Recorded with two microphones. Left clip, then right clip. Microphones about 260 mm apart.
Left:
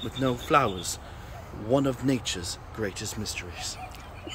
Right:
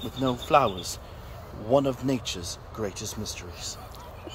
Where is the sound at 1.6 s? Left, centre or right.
Centre.